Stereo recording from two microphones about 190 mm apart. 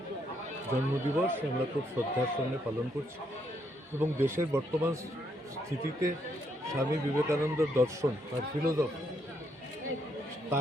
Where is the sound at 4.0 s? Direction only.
15° right (ahead or behind).